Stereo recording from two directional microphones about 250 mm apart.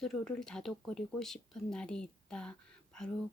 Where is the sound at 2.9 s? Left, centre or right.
Centre.